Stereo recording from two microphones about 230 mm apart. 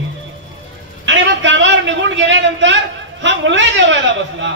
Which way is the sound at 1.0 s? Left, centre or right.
Right.